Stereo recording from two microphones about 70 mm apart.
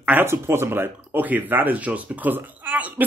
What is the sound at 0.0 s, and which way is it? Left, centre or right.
Speech, right.